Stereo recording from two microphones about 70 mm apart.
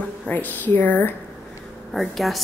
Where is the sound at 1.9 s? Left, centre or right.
Centre.